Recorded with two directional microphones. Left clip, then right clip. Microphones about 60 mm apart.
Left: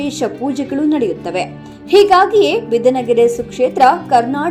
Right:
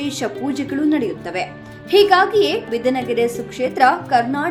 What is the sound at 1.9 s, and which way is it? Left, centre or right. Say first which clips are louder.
A woman's voice: left 4 dB; left.